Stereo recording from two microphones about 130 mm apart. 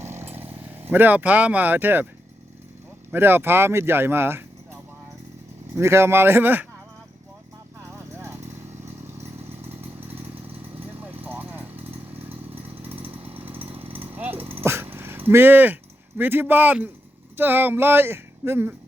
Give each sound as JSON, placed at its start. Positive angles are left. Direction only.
{"t": 0.0, "sound": "vehicle", "side_deg": -20}
{"t": 3.1, "sound": "speech", "side_deg": -15}
{"t": 7.9, "sound": "vehicle", "side_deg": -20}
{"t": 10.2, "sound": "chainsaw", "side_deg": -15}
{"t": 11.2, "sound": "vehicle", "side_deg": -15}
{"t": 13.0, "sound": "chainsaw", "side_deg": -45}
{"t": 14.2, "sound": "dog", "side_deg": -15}
{"t": 17.3, "sound": "speech", "side_deg": -15}